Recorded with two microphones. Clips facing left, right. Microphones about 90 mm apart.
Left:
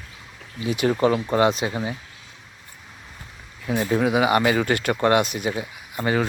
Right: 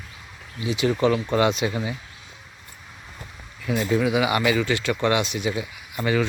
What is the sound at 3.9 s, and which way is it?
Speech, 40° left (ahead or behind).